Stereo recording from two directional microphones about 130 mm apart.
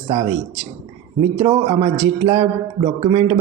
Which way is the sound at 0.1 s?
35° right (ahead or behind).